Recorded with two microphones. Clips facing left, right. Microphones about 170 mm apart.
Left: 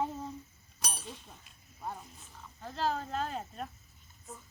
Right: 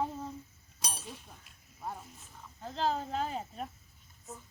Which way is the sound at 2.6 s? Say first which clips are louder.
Right 1 dB; 20° right (ahead or behind).